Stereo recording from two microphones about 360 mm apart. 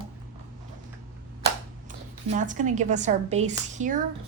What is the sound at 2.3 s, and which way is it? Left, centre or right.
A woman's voice, right.